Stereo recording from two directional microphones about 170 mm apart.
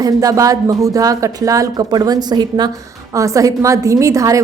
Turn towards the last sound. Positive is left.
turn(degrees=-20)  # may be behind; listen again after turning